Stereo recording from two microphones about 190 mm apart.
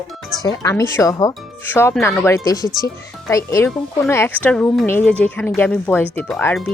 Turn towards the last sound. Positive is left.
turn(degrees=5)  # may be behind; listen again after turning